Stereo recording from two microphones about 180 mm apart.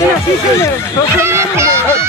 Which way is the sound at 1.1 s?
15° right (ahead or behind).